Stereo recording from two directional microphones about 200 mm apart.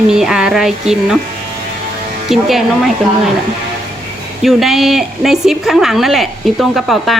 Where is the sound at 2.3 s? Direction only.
Centre (ahead or behind).